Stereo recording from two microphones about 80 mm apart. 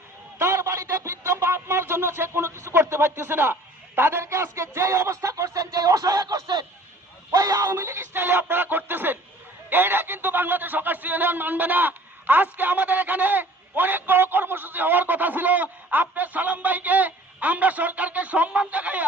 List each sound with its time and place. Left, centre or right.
0.3 s speech: right
7.3 s a sound: right
7.7 s speech: right; by 19.0 s centre